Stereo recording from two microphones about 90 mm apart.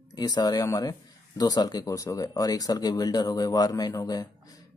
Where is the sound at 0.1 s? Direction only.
50° left (ahead or behind).